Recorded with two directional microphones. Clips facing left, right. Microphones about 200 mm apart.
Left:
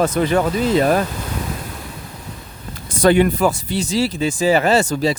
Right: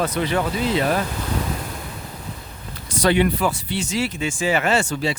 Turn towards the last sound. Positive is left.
turn(degrees=40)  # may be behind; listen again after turning